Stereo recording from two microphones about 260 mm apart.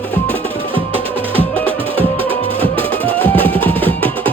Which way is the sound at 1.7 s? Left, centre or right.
Right.